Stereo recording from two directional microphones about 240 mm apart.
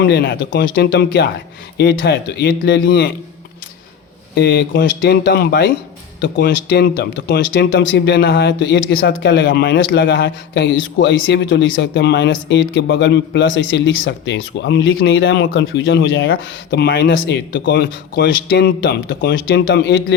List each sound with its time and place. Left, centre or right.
0.0 s speech: left
4.4 s speech: left